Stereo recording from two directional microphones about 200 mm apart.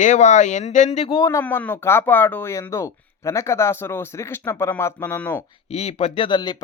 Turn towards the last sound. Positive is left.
turn(degrees=20)  # may be behind; listen again after turning